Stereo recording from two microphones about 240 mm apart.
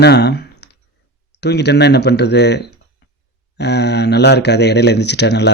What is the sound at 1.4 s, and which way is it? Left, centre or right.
Speech, left.